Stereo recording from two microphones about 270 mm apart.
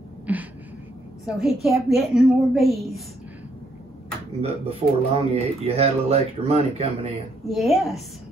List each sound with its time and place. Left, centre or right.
0.3 s a sound: centre
1.2 s a woman's voice: centre
4.4 s speech: right
7.4 s a woman's voice: centre